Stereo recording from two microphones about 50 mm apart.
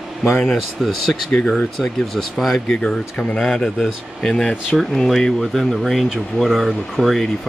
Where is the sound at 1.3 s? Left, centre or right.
Centre.